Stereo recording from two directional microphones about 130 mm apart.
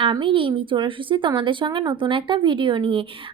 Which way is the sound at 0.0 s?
40° right (ahead or behind).